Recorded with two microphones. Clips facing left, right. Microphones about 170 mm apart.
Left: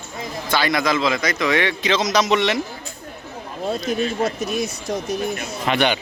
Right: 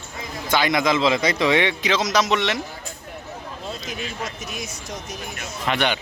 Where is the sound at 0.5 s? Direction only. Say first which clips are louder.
Even; 20° right (ahead or behind).